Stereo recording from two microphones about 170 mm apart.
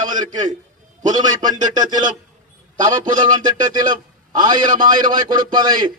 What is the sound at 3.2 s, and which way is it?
A man's voice, 25° right (ahead or behind).